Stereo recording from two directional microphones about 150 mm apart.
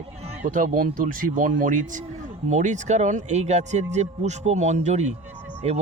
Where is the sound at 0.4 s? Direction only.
60° right (ahead or behind).